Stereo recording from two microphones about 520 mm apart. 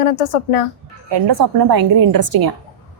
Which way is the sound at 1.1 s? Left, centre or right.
Right.